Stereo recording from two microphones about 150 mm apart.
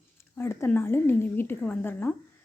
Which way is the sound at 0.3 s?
15° left (ahead or behind).